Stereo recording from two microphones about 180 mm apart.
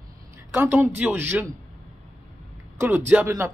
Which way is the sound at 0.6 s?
10° right (ahead or behind).